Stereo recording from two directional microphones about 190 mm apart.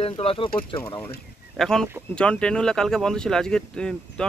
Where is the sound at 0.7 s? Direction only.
15° left (ahead or behind).